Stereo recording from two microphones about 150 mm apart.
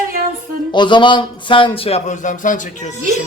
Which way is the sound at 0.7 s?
30° left (ahead or behind).